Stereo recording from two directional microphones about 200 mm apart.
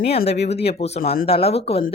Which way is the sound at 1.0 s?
50° left (ahead or behind).